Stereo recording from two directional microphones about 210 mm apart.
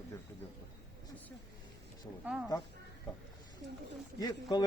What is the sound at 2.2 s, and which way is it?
Speech, 5° right (ahead or behind).